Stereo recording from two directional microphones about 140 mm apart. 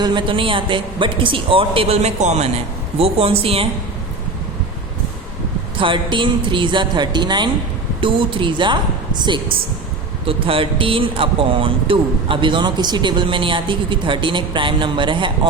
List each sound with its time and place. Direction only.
0.0 s a man's voice: 35° right (ahead or behind)
5.7 s a man's voice: 35° right (ahead or behind)